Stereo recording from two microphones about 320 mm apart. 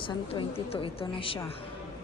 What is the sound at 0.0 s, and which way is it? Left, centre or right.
A woman's voice, centre.